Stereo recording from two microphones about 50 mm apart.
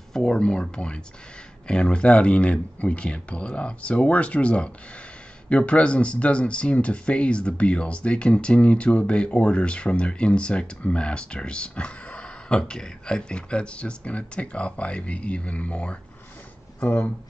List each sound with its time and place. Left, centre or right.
0.1 s speech: centre